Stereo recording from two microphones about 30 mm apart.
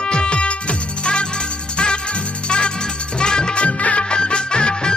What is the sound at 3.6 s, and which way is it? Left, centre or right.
Music, left.